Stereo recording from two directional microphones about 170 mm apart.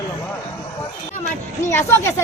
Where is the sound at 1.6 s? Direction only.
15° left (ahead or behind).